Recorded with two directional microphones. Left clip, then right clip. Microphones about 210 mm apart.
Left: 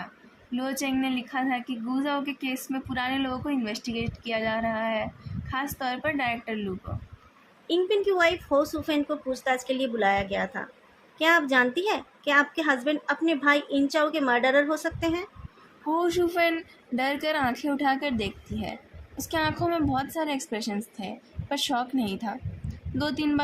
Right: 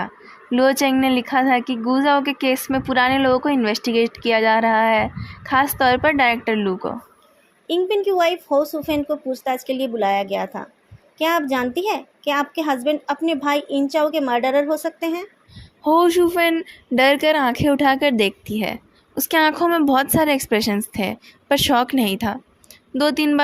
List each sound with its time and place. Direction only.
0.5 s speech: 45° right (ahead or behind)
7.7 s a woman's voice: 25° right (ahead or behind)
15.9 s a woman's voice: 40° right (ahead or behind)